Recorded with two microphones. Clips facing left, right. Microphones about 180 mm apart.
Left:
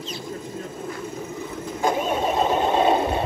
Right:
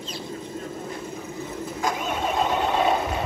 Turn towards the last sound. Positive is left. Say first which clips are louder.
# left 3 dB
turn(degrees=25)  # may be behind; listen again after turning